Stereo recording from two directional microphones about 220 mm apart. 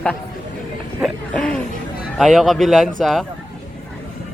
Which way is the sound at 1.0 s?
5° left (ahead or behind).